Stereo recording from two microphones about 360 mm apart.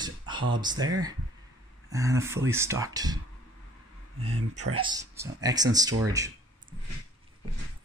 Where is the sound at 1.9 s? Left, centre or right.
Centre.